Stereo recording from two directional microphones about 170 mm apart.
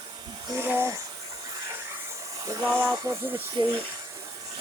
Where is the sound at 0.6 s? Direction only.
15° right (ahead or behind).